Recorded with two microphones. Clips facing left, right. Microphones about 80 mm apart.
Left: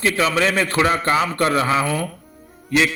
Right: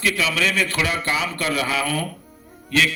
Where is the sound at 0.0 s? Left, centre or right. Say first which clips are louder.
Left 4 dB; left.